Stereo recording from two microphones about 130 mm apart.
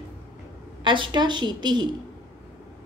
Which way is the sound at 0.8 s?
40° right (ahead or behind).